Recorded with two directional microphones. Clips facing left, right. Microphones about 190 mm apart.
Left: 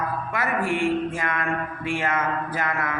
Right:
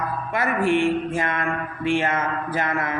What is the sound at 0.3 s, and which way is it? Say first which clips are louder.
Speech: right 5 dB; 25° right (ahead or behind).